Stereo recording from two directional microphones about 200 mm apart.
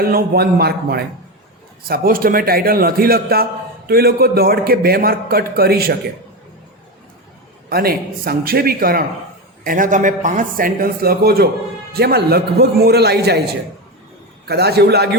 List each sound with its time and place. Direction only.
0.0 s a man's voice: 50° right (ahead or behind)
7.7 s a man's voice: 50° right (ahead or behind)